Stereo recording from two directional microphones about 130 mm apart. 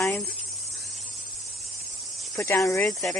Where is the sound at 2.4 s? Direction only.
25° left (ahead or behind).